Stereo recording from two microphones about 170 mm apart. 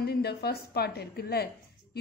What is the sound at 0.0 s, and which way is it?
A woman's voice, 70° left (ahead or behind).